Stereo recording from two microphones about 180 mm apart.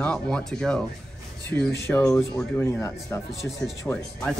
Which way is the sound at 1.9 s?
10° left (ahead or behind).